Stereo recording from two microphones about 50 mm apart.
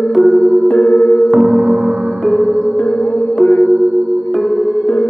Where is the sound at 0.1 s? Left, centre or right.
Centre.